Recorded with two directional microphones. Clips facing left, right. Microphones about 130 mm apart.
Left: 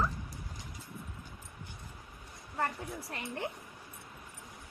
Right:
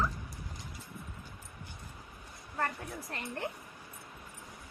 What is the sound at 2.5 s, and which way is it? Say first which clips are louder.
Speech: left 1 dB; 15° left (ahead or behind).